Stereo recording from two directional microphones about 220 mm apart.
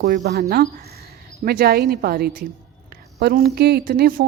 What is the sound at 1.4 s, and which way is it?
A woman's voice, 45° right (ahead or behind).